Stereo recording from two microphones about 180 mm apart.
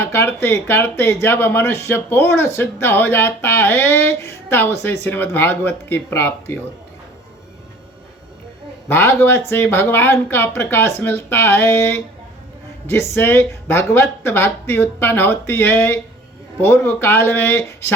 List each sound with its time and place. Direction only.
0.0 s a sound: 15° left (ahead or behind)
0.4 s speech: 10° left (ahead or behind)
8.9 s speech: 15° left (ahead or behind)
13.1 s speech: 15° left (ahead or behind)